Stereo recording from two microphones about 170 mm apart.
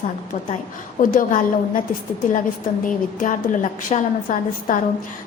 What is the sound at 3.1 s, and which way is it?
A woman's voice, 50° left (ahead or behind).